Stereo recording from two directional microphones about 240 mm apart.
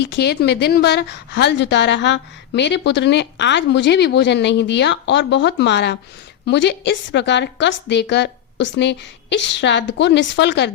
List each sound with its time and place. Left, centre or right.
0.0 s a woman's voice: left